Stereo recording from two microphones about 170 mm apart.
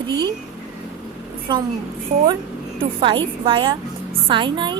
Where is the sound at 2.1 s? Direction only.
35° right (ahead or behind).